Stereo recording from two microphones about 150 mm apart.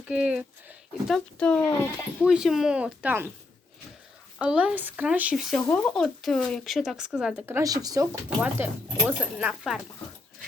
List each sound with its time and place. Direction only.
0.1 s speech: 5° right (ahead or behind); by 1.9 s 10° left (ahead or behind)
2.2 s speech: 5° right (ahead or behind)
4.4 s speech: 10° right (ahead or behind)
7.4 s speech: 20° right (ahead or behind)
8.4 s speech: 15° right (ahead or behind)